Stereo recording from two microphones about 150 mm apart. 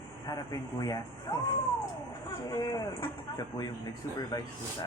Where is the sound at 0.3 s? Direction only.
25° left (ahead or behind).